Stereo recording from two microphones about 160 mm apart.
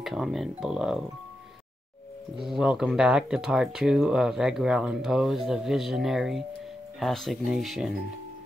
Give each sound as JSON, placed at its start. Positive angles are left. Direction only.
{"t": 0.0, "sound": "speech", "side_deg": 0}
{"t": 2.4, "sound": "speech", "side_deg": -5}